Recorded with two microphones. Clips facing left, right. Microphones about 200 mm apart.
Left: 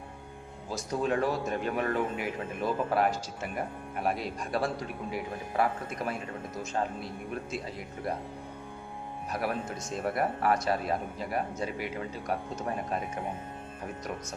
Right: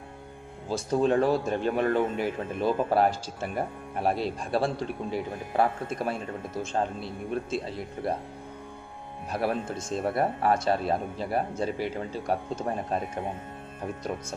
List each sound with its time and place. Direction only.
0.7 s speech: 30° right (ahead or behind)
9.3 s speech: 30° right (ahead or behind)